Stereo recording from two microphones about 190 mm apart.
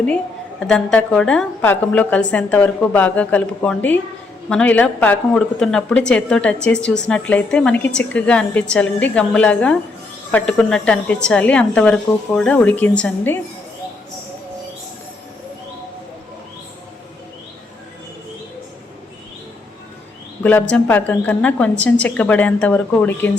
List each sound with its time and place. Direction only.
0.7 s a woman's voice: 5° left (ahead or behind)
20.4 s a woman's voice: 10° left (ahead or behind)